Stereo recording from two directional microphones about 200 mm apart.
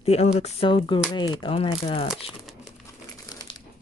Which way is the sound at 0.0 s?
30° left (ahead or behind).